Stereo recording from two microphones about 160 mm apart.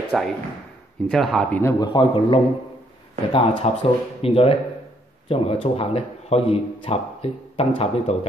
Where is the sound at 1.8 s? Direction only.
30° left (ahead or behind).